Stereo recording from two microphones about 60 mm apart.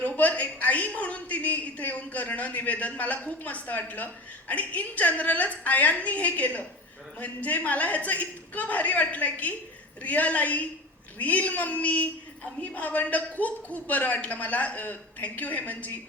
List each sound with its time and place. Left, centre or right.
0.2 s a man's voice: left